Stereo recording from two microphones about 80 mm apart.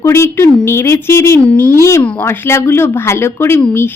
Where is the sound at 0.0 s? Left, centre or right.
Left.